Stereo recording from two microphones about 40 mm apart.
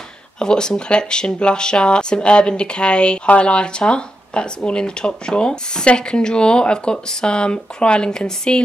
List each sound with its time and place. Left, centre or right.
0.4 s speech: centre